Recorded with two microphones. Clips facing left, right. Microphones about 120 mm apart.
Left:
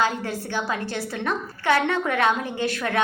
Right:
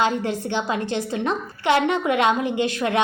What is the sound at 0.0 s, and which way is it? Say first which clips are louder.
A woman's voice: right 3 dB; 20° right (ahead or behind).